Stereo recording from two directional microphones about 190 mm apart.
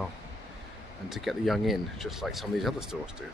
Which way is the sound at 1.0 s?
Centre (ahead or behind).